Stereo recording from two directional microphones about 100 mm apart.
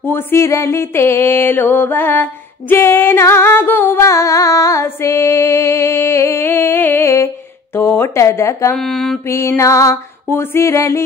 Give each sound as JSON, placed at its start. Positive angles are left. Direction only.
{"t": 0.0, "sound": "mantra", "side_deg": 25}
{"t": 2.7, "sound": "music", "side_deg": 25}
{"t": 7.7, "sound": "speech", "side_deg": 25}
{"t": 8.7, "sound": "mantra", "side_deg": 5}
{"t": 9.3, "sound": "mantra", "side_deg": 30}